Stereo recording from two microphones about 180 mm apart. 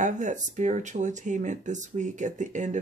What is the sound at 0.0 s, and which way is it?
Speech, 45° right (ahead or behind).